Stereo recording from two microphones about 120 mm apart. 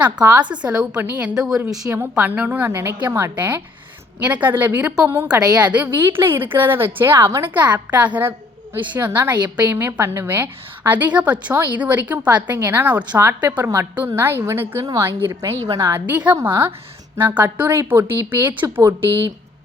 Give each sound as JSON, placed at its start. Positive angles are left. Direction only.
{"t": 0.2, "sound": "a woman's voice", "side_deg": -10}
{"t": 5.3, "sound": "a woman's voice", "side_deg": -30}
{"t": 5.7, "sound": "a woman's voice", "side_deg": -15}